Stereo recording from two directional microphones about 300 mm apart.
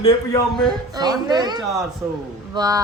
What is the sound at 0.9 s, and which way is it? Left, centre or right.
Speech, centre.